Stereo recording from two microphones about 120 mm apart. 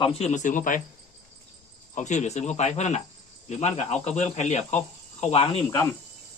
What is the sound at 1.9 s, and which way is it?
Speech, 75° left (ahead or behind).